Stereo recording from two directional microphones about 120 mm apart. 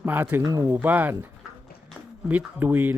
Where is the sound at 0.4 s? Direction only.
30° right (ahead or behind).